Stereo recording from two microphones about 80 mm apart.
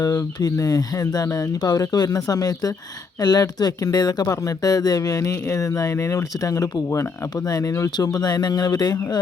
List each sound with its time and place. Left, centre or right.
0.0 s speech: left
7.9 s speech: left